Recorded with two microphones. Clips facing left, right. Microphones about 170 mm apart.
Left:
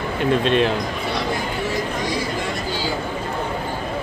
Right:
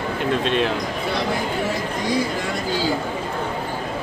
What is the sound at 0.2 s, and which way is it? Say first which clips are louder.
Speech: left 4 dB; centre (ahead or behind).